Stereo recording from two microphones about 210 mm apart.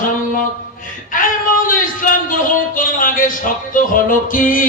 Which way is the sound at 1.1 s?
40° left (ahead or behind).